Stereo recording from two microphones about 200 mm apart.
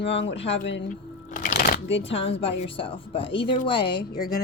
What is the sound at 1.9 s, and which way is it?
A woman's voice, 30° left (ahead or behind).